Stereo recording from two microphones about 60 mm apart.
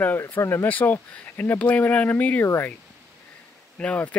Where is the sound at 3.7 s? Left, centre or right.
Left.